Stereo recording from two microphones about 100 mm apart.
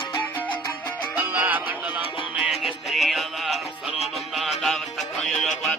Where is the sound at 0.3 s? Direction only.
15° left (ahead or behind).